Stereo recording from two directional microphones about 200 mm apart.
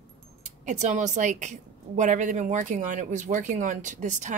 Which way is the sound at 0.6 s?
35° right (ahead or behind).